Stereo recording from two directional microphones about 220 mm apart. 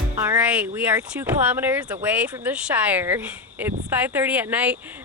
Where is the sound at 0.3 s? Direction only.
5° right (ahead or behind).